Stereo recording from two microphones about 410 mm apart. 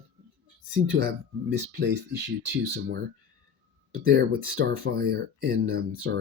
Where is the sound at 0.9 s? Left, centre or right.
Right.